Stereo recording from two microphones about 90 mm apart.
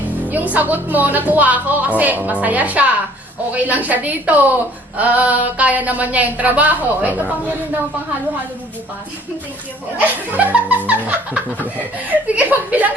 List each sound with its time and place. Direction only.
0.3 s a woman's voice: 20° right (ahead or behind)
10.0 s a woman's voice: 20° right (ahead or behind)
10.8 s laughter: 20° right (ahead or behind)
12.0 s speech: 15° right (ahead or behind)